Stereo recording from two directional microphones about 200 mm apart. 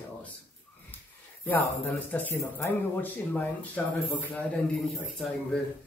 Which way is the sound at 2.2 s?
10° left (ahead or behind).